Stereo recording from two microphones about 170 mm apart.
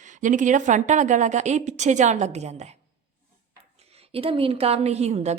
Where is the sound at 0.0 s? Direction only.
50° right (ahead or behind).